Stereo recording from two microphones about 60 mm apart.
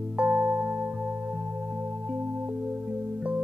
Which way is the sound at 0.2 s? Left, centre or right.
Right.